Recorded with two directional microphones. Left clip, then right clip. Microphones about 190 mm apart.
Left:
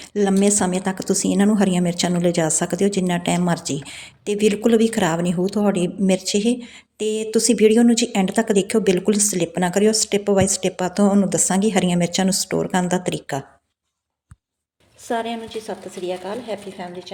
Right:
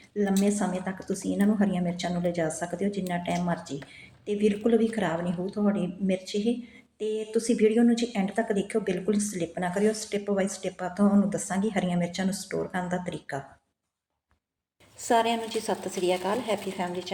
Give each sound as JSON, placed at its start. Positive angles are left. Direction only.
{"t": 0.0, "sound": "speech", "side_deg": 65}
{"t": 15.0, "sound": "a woman's voice", "side_deg": 10}